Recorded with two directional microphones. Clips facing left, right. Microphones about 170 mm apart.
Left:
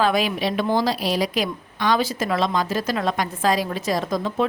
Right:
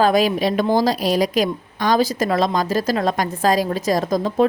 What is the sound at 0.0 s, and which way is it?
A woman's voice, 40° right (ahead or behind).